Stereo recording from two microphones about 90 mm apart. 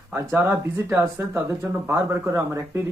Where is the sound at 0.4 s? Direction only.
30° right (ahead or behind).